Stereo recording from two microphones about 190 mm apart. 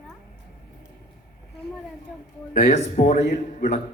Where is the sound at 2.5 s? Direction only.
40° left (ahead or behind).